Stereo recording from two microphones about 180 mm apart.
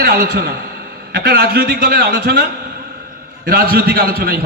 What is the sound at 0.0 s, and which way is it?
A man's voice, 60° right (ahead or behind).